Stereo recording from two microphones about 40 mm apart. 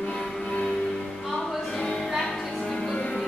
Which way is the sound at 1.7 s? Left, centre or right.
Left.